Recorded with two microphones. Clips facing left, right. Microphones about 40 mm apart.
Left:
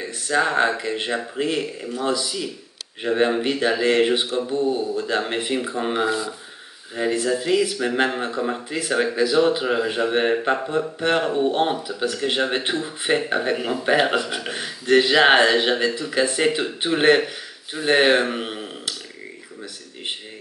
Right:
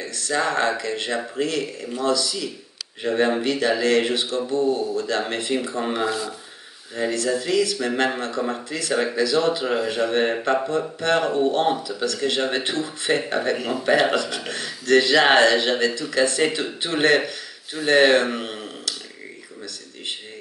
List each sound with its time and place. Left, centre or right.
0.0 s a man's voice: centre